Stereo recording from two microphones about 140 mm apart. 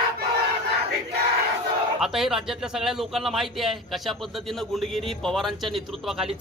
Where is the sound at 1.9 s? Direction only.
5° right (ahead or behind).